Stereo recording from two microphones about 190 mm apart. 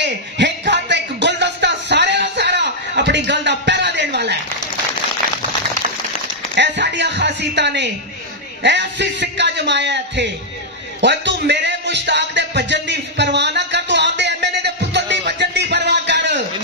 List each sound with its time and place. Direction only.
0.0 s music: 65° right (ahead or behind)
6.5 s a sound: 65° right (ahead or behind)
8.6 s a man's voice: 65° right (ahead or behind)
11.0 s music: 65° right (ahead or behind)